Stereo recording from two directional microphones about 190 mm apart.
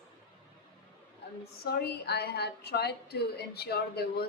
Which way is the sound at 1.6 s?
55° left (ahead or behind).